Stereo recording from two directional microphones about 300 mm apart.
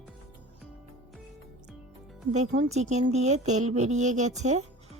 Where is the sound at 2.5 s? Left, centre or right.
Right.